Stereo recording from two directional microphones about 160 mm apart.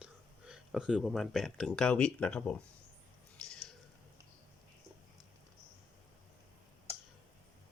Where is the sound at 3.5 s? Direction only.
5° left (ahead or behind).